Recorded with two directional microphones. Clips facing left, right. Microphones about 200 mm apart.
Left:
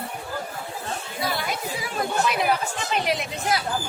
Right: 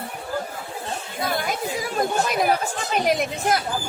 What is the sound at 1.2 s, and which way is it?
Chatter, 45° right (ahead or behind).